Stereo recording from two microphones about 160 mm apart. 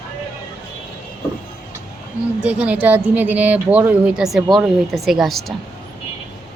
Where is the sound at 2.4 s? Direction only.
10° right (ahead or behind).